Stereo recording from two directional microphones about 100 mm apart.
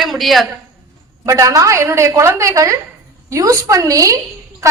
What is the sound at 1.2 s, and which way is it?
A woman's voice, 30° right (ahead or behind).